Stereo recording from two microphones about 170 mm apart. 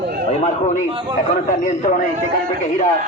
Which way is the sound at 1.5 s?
50° left (ahead or behind).